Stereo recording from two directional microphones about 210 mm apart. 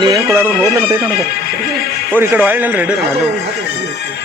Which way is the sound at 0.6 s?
15° right (ahead or behind).